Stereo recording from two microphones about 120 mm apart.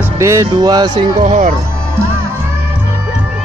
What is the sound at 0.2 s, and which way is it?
Speech, 25° right (ahead or behind).